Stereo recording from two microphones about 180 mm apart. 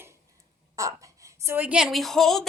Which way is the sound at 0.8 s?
15° right (ahead or behind).